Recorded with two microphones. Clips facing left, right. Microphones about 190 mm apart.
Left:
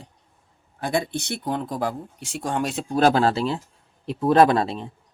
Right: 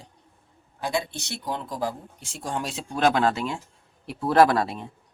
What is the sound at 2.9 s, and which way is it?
Speech, 35° left (ahead or behind).